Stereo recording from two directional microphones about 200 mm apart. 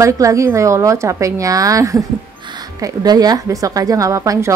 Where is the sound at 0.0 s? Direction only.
15° right (ahead or behind).